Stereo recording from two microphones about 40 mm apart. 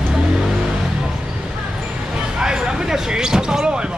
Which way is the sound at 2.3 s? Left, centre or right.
Centre.